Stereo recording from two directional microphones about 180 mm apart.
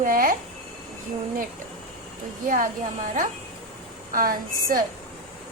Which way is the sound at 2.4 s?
50° right (ahead or behind).